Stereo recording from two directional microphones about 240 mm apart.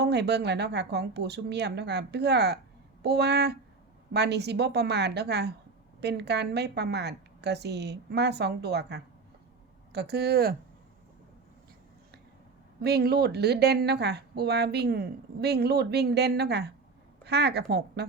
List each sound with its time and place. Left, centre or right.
0.0 s a woman's voice: right
12.8 s a woman's voice: right